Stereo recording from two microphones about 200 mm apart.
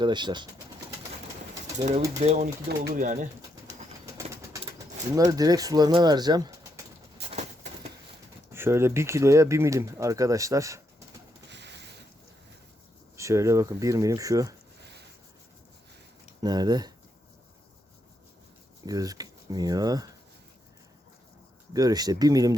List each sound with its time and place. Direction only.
0.0 s speech: 20° right (ahead or behind)
2.2 s speech: 35° right (ahead or behind)
2.6 s speech: 45° right (ahead or behind)
5.1 s speech: 15° right (ahead or behind)
8.5 s speech: 10° right (ahead or behind)
11.4 s a sound: 60° right (ahead or behind)
13.1 s speech: 15° right (ahead or behind)
16.4 s speech: 20° right (ahead or behind)
18.9 s speech: 20° right (ahead or behind)
21.7 s speech: 20° right (ahead or behind)